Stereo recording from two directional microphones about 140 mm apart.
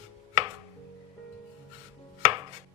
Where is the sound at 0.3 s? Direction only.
35° right (ahead or behind).